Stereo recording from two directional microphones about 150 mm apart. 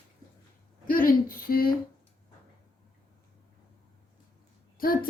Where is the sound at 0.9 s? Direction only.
70° left (ahead or behind).